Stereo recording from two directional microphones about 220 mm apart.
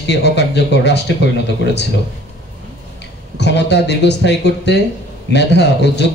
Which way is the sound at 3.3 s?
50° left (ahead or behind).